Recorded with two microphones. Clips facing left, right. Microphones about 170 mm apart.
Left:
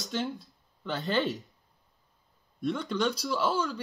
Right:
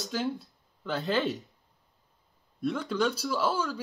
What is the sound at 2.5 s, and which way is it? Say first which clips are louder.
Speech: right 1 dB; 5° right (ahead or behind).